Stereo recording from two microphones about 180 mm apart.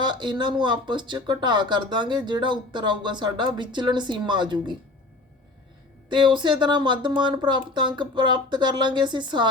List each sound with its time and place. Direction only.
0.0 s speech: 25° right (ahead or behind)
6.1 s speech: 25° right (ahead or behind)